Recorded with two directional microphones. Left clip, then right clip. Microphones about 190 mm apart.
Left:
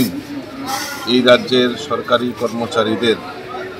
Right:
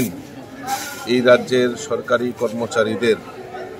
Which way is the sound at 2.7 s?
30° right (ahead or behind).